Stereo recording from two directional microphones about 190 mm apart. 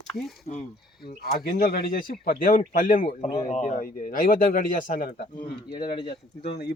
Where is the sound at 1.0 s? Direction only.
55° left (ahead or behind).